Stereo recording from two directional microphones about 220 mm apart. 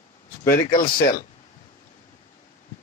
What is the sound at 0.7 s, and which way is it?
Speech, 40° left (ahead or behind).